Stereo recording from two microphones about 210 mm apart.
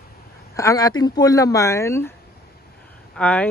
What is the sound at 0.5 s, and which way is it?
A man's voice, 15° left (ahead or behind).